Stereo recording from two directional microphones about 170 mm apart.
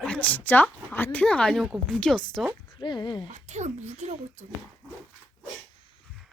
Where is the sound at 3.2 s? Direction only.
45° right (ahead or behind).